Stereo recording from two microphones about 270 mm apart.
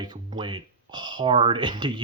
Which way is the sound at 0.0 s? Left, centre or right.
Centre.